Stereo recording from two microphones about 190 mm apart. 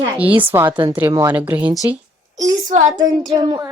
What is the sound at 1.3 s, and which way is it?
Speech, 10° right (ahead or behind).